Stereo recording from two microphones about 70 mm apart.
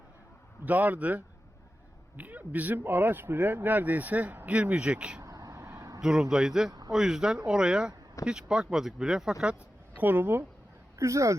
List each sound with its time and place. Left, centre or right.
0.6 s speech: right
5.2 s a sound: right
6.0 s speech: centre
6.7 s speech: right
6.9 s speech: centre
10.0 s speech: right
10.9 s speech: right